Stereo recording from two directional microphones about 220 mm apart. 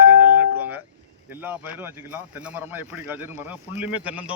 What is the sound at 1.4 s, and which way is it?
Speech, 5° right (ahead or behind).